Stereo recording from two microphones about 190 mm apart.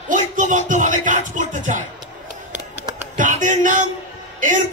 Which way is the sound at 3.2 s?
40° right (ahead or behind).